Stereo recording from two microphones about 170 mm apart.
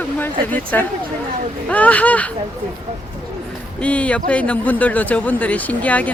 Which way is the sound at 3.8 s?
10° left (ahead or behind).